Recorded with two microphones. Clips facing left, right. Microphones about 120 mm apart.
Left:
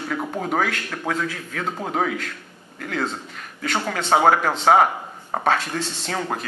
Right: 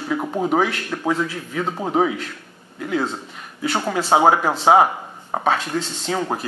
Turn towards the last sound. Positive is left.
turn(degrees=-10)  # may be behind; listen again after turning